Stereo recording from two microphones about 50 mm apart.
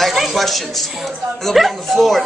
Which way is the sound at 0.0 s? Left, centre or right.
Centre.